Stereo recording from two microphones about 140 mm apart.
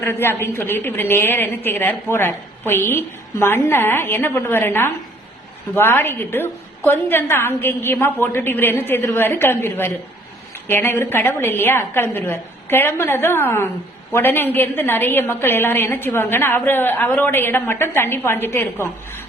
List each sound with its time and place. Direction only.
0.0 s a woman's voice: 15° left (ahead or behind)